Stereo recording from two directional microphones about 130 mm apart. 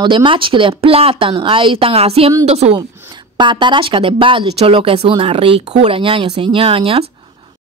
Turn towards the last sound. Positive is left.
turn(degrees=-45)  # may be behind; listen again after turning